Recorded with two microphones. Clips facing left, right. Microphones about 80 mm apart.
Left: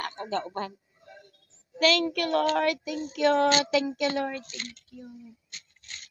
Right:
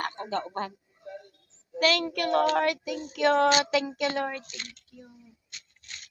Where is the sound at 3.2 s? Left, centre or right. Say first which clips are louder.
Even; right.